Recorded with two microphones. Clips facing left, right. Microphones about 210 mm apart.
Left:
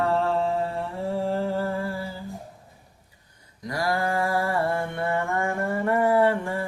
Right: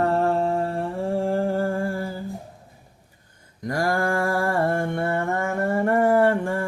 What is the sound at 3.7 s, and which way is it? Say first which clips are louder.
Mantra: right 3 dB; 45° right (ahead or behind).